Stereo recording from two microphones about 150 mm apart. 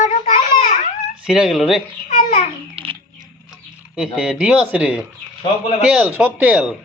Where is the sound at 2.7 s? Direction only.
35° right (ahead or behind).